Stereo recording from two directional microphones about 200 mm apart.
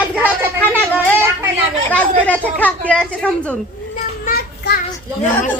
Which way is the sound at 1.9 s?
5° left (ahead or behind).